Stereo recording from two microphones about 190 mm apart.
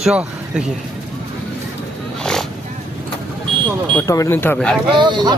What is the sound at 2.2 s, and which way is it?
Roaring cats, 5° left (ahead or behind).